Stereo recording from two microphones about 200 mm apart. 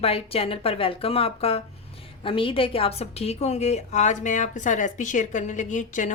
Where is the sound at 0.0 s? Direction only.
30° left (ahead or behind).